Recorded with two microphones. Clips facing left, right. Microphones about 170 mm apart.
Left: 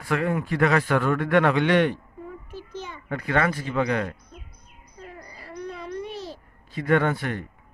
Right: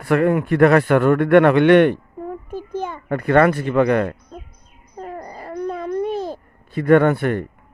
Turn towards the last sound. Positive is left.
turn(degrees=-55)  # may be behind; listen again after turning